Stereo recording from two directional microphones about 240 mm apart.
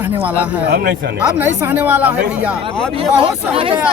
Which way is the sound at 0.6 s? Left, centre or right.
Right.